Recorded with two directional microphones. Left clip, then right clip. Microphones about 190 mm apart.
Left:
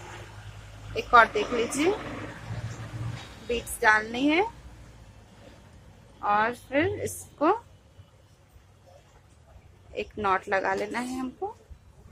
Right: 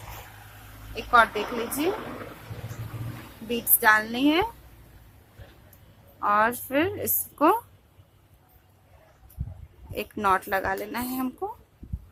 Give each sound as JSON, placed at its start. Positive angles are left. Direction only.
{"t": 0.9, "sound": "speech", "side_deg": 0}
{"t": 3.8, "sound": "a woman's voice", "side_deg": -10}
{"t": 6.2, "sound": "a woman's voice", "side_deg": -20}
{"t": 9.9, "sound": "a woman's voice", "side_deg": -20}
{"t": 10.5, "sound": "speech", "side_deg": 0}